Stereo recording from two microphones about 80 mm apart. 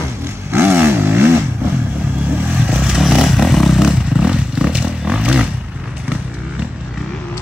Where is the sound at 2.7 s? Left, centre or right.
Centre.